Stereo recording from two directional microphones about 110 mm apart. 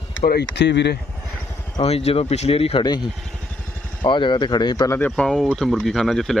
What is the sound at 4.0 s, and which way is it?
Speech, 45° left (ahead or behind).